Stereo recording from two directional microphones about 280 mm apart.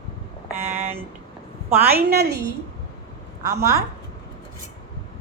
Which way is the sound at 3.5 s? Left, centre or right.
Centre.